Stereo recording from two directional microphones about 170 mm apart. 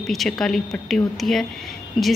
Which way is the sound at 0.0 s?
Centre (ahead or behind).